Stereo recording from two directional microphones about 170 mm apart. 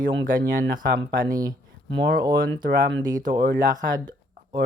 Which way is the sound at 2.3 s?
60° right (ahead or behind).